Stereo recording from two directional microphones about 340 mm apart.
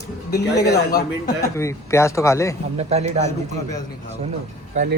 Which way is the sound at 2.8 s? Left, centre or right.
Centre.